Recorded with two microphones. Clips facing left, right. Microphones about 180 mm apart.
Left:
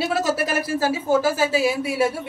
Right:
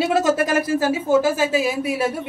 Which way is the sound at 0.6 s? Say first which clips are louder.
Right 2 dB; 15° right (ahead or behind).